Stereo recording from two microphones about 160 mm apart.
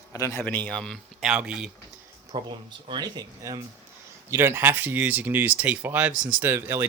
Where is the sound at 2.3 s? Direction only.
30° right (ahead or behind); by 6.8 s 15° right (ahead or behind).